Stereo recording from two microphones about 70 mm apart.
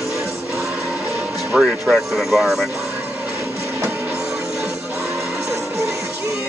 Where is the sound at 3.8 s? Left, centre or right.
Right.